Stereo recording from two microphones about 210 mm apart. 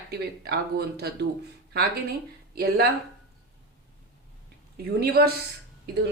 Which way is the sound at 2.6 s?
50° right (ahead or behind).